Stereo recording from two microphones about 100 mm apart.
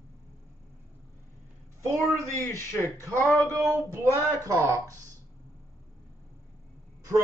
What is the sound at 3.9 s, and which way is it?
A man's voice, 30° right (ahead or behind).